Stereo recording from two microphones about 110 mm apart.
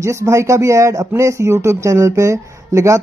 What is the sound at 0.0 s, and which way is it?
Speech, 25° right (ahead or behind).